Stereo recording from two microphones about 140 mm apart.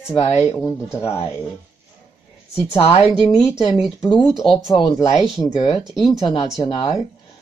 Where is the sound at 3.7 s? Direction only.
Centre (ahead or behind).